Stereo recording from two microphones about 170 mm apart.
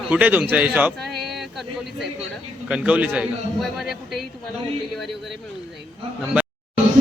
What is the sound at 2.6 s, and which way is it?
A man's voice, 5° right (ahead or behind).